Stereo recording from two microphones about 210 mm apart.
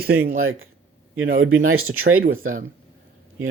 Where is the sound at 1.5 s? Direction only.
85° right.